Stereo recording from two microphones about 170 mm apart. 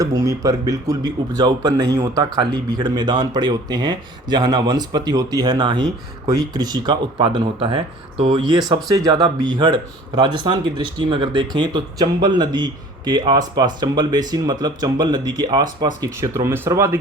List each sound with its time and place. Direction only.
0.0 s speech: 20° right (ahead or behind)